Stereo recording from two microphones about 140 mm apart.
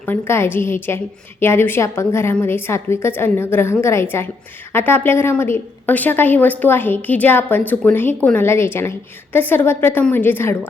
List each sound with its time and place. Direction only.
0.0 s a woman's voice: 15° left (ahead or behind)